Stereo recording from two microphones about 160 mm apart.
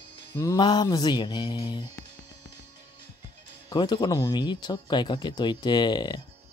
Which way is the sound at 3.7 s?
30° left (ahead or behind).